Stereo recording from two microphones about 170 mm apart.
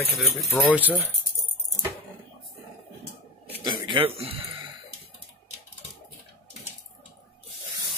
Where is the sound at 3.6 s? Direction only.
25° right (ahead or behind).